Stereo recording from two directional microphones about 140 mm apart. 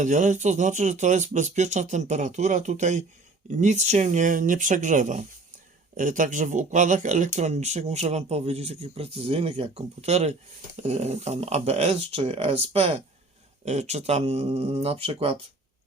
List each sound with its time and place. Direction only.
0.0 s speech: 60° right (ahead or behind); by 15.4 s 45° right (ahead or behind)